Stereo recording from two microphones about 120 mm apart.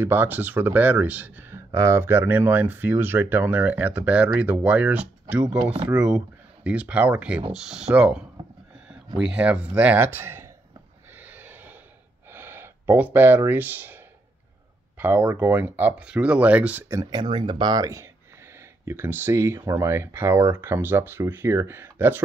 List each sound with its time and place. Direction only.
0.0 s speech: 15° right (ahead or behind)
5.6 s speech: 45° right (ahead or behind)
5.9 s speech: 10° right (ahead or behind)
9.2 s speech: 10° right (ahead or behind)
11.1 s a sound: 15° right (ahead or behind)
15.0 s speech: 15° right (ahead or behind)
16.9 s speech: 35° right (ahead or behind)